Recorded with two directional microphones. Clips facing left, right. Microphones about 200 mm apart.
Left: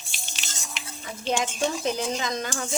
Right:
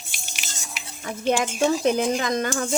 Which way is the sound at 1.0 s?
55° right (ahead or behind).